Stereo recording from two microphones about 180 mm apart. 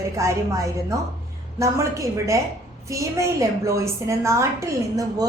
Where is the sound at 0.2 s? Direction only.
15° right (ahead or behind).